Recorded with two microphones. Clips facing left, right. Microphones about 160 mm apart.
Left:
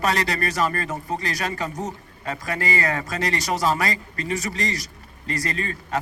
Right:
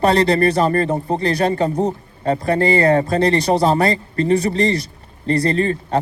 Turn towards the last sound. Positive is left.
turn(degrees=-30)  # may be behind; listen again after turning